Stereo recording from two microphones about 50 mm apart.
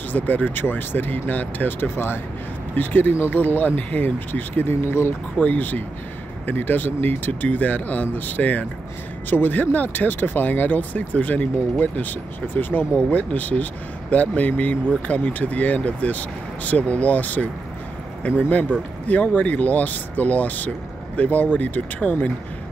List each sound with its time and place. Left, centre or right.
0.1 s speech: left
2.7 s speech: left
4.6 s speech: left
5.4 s speech: left